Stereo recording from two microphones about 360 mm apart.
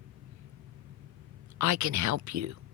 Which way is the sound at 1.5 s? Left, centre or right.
Right.